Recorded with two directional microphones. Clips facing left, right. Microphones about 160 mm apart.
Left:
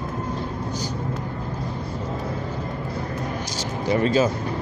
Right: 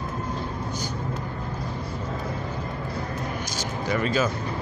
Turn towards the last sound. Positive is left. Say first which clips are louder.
# left 5 dB
turn(degrees=30)  # may be behind; listen again after turning